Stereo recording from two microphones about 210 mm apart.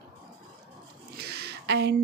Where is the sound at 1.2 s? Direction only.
50° right (ahead or behind).